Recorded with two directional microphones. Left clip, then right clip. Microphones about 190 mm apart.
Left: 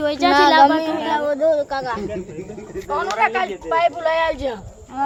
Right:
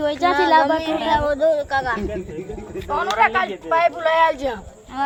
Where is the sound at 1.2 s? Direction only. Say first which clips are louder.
Even; 30° left (ahead or behind).